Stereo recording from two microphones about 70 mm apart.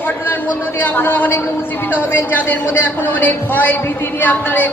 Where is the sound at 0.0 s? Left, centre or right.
Left.